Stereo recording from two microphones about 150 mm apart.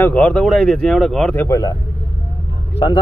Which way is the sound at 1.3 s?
15° left (ahead or behind).